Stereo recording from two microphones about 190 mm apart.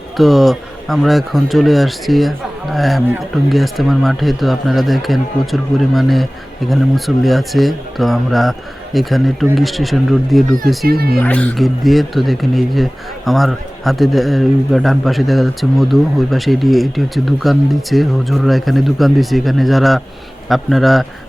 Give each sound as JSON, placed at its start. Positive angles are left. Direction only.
{"t": 0.2, "sound": "speech", "side_deg": 0}
{"t": 10.8, "sound": "speech", "side_deg": -55}
{"t": 11.1, "sound": "speech", "side_deg": 5}